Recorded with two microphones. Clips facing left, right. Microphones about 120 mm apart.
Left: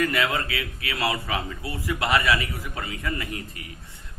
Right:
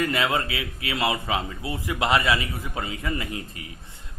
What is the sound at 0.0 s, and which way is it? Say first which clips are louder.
A man's voice: even; 25° right (ahead or behind).